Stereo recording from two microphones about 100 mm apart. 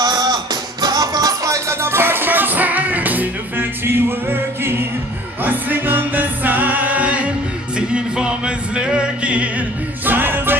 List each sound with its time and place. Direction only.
0.0 s music: 45° right (ahead or behind); by 10.6 s 20° right (ahead or behind)